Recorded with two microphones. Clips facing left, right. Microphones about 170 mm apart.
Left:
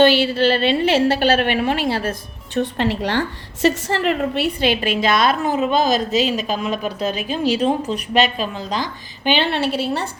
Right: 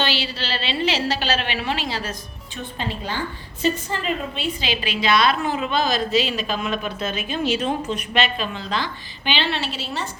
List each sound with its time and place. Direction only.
0.0 s a woman's voice: 50° left (ahead or behind)
2.6 s a woman's voice: 75° left (ahead or behind); by 10.1 s 60° left (ahead or behind)